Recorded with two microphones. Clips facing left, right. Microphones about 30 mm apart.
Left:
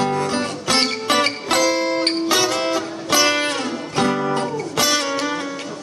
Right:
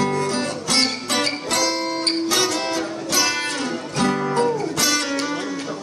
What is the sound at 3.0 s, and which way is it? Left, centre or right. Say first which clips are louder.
Music: left 6 dB; left.